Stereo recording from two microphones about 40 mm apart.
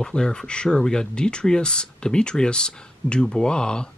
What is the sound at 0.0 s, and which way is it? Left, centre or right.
Speech, centre.